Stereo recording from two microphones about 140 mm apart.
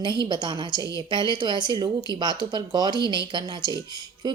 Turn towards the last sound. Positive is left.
turn(degrees=-30)  # may be behind; listen again after turning